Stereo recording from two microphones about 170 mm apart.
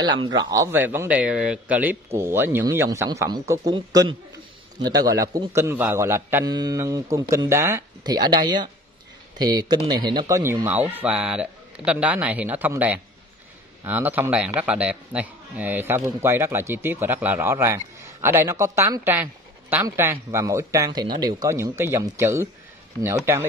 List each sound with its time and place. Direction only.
0.0 s a man's voice: 25° right (ahead or behind)